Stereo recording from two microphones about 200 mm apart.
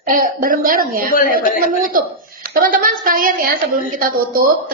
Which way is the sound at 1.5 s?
45° right (ahead or behind).